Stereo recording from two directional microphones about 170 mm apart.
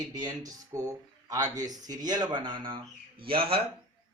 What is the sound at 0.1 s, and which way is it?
Speech, 20° right (ahead or behind).